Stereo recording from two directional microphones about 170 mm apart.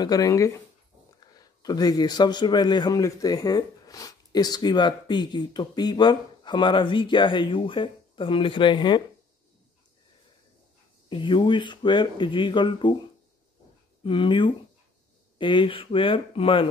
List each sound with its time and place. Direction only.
0.0 s a man's voice: 20° left (ahead or behind)
11.1 s a man's voice: 30° left (ahead or behind)
14.0 s a man's voice: 30° left (ahead or behind)